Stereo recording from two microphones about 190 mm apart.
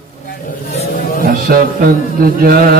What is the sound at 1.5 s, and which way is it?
Mantra, 50° right (ahead or behind).